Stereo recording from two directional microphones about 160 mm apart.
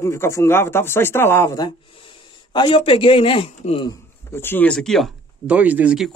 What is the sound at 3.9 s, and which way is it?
Speech, 15° left (ahead or behind).